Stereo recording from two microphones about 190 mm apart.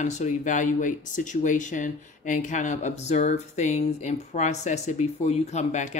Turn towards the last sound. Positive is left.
turn(degrees=35)  # may be behind; listen again after turning